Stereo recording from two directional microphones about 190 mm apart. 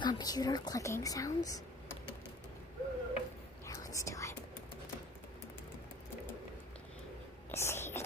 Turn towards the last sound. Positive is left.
turn(degrees=15)  # may be behind; listen again after turning